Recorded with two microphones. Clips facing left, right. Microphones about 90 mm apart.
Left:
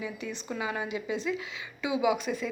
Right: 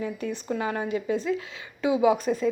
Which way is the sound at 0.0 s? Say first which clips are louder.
Right 6 dB; 45° right (ahead or behind).